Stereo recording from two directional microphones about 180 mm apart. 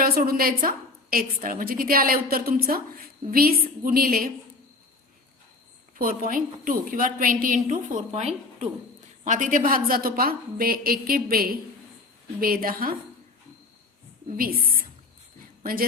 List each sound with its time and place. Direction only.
0.0 s a woman's voice: 55° right (ahead or behind)
6.0 s a woman's voice: 50° right (ahead or behind)
14.3 s a woman's voice: 55° right (ahead or behind)
15.6 s a woman's voice: 55° right (ahead or behind)